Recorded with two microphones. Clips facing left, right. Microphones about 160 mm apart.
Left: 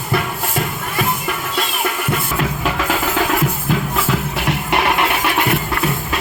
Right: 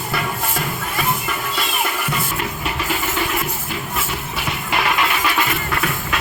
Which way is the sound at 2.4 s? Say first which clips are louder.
Left 5 dB; 90° left.